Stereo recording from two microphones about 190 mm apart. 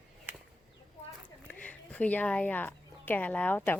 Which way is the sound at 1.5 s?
5° left (ahead or behind).